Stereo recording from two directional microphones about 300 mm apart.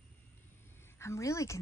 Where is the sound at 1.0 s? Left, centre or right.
Centre.